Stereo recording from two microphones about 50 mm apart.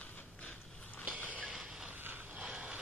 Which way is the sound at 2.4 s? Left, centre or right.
Centre.